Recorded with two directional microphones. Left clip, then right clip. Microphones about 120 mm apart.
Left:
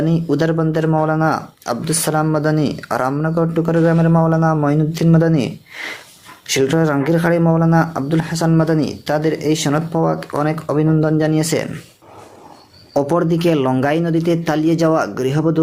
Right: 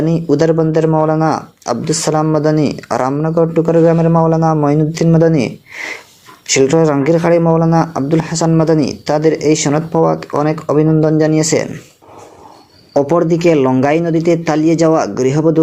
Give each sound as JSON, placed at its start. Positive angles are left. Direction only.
{"t": 0.0, "sound": "speech", "side_deg": -20}
{"t": 12.9, "sound": "speech", "side_deg": -15}